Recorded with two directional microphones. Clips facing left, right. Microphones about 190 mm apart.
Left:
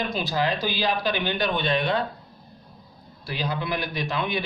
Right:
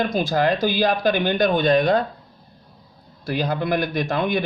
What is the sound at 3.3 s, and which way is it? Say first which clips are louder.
Speech: right 6 dB; 50° right (ahead or behind).